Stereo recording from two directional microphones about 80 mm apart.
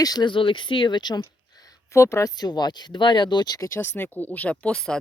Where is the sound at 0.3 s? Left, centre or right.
Left.